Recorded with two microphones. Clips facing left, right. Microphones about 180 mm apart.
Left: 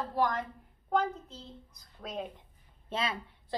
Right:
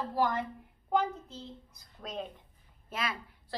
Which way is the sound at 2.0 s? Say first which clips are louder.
Left 1 dB; 5° left (ahead or behind).